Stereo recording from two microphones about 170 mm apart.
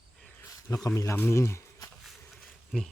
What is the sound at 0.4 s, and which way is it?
Speech, 15° left (ahead or behind).